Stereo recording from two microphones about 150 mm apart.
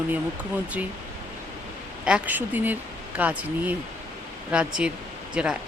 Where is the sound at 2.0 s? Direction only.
10° right (ahead or behind).